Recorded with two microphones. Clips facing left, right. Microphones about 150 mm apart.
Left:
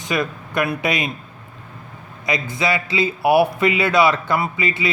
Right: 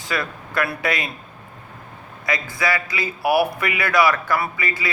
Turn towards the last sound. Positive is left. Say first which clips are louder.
# left 3 dB
turn(degrees=20)  # may be behind; listen again after turning